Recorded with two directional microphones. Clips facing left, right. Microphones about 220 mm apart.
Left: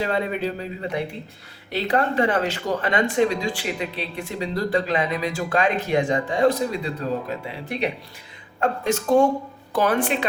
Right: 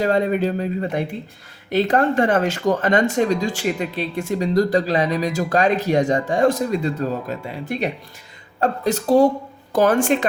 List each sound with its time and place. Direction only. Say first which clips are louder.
0.0 s speech: right 5 dB; 45° right (ahead or behind)